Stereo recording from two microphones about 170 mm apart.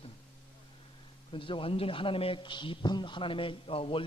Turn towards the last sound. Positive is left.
turn(degrees=30)  # may be behind; listen again after turning